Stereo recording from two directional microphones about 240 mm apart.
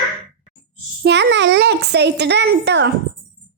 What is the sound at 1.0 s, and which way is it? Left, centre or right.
A child's voice, right.